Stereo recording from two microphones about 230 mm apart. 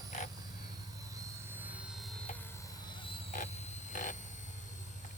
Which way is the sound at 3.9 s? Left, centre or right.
Left.